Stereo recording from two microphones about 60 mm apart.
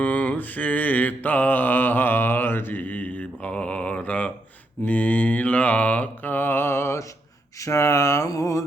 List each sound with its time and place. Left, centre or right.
0.0 s mantra: left